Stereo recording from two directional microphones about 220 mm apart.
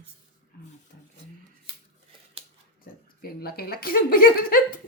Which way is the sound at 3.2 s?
45° left (ahead or behind).